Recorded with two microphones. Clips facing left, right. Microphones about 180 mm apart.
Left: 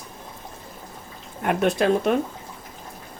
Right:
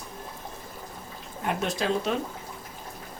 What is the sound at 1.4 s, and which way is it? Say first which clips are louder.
Speech: left 7 dB; 60° left (ahead or behind).